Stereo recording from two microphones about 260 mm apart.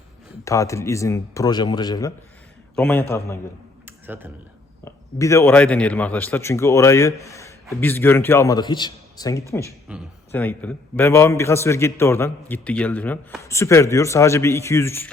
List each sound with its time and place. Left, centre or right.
0.4 s a man's voice: centre
2.7 s a man's voice: centre
3.8 s computer keyboard: centre
4.9 s a man's voice: centre